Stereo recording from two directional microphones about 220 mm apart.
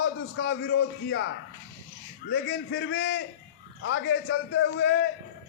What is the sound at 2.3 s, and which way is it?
A man's voice, 55° left (ahead or behind).